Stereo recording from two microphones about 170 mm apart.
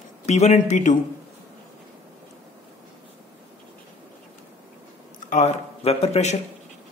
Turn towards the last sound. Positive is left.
turn(degrees=40)  # may be behind; listen again after turning